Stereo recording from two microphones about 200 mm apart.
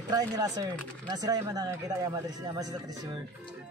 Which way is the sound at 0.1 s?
20° right (ahead or behind).